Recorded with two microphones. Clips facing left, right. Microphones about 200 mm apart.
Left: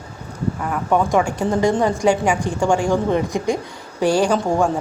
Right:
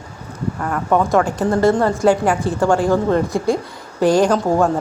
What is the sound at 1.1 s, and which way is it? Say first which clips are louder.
A woman's voice: right 2 dB; 10° left (ahead or behind).